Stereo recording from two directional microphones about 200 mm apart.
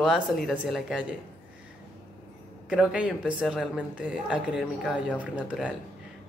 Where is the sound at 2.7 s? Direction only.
5° right (ahead or behind).